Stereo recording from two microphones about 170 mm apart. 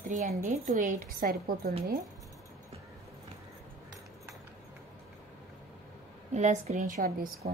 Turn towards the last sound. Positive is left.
turn(degrees=-65)  # may be behind; listen again after turning